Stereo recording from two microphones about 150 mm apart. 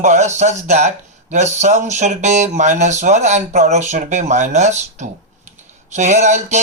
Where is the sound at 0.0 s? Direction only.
50° right (ahead or behind).